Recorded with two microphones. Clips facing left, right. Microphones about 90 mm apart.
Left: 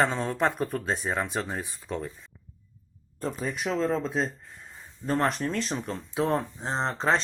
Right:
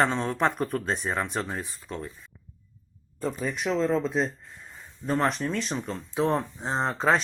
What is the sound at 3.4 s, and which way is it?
Speech, centre (ahead or behind).